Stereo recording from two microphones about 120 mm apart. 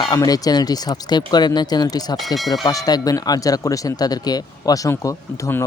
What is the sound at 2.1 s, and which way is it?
Speech, centre (ahead or behind).